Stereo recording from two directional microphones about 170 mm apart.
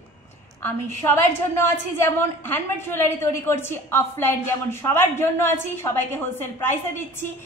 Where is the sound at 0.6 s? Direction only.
10° left (ahead or behind).